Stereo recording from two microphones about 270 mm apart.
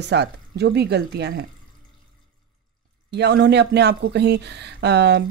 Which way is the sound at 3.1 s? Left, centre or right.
Right.